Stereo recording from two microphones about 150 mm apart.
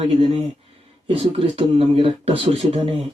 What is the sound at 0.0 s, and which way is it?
A man's voice, 45° right (ahead or behind).